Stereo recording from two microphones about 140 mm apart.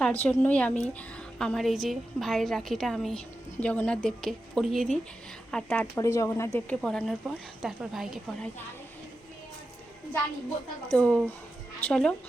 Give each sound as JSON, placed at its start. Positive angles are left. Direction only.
{"t": 0.0, "sound": "a woman's voice", "side_deg": 10}
{"t": 6.0, "sound": "speech", "side_deg": 25}
{"t": 6.8, "sound": "a woman's voice", "side_deg": 5}
{"t": 10.9, "sound": "a woman's voice", "side_deg": 5}